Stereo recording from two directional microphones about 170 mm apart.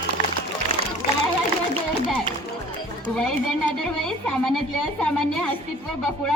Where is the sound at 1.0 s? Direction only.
60° left (ahead or behind).